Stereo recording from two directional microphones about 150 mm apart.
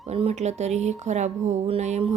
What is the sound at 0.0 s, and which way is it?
Speech, 45° right (ahead or behind).